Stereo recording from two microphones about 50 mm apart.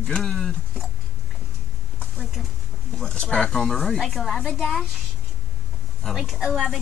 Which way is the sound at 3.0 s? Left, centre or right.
Centre.